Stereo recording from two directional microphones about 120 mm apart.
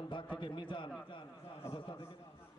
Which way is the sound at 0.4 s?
40° left (ahead or behind).